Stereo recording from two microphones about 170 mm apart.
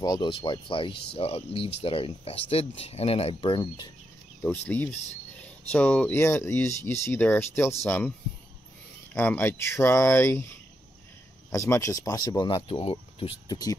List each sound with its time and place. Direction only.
0.0 s speech: 25° left (ahead or behind)
4.4 s speech: 10° left (ahead or behind)
9.1 s speech: 10° left (ahead or behind)
11.5 s speech: 15° left (ahead or behind)